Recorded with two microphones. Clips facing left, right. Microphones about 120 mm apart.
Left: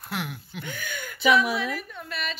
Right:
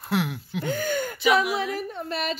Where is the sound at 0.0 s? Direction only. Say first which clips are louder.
Right 7 dB; centre (ahead or behind).